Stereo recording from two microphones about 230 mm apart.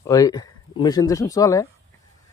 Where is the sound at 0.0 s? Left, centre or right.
Centre.